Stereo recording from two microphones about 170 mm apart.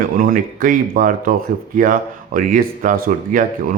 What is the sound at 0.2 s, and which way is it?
Speech, 55° right (ahead or behind).